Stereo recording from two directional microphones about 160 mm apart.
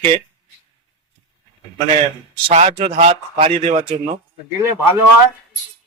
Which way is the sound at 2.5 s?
40° right (ahead or behind).